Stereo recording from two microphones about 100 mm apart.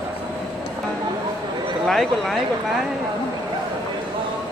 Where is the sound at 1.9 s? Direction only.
5° left (ahead or behind).